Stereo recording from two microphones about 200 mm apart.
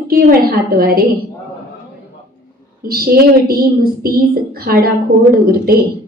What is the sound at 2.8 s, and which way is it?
A woman's voice, 50° right (ahead or behind).